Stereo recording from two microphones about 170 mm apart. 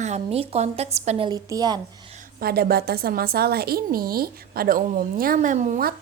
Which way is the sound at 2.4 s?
65° right (ahead or behind).